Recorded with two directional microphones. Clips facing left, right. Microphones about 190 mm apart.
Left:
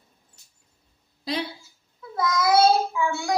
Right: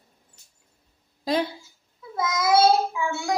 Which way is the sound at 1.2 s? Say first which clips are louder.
Right 5 dB; 45° right (ahead or behind).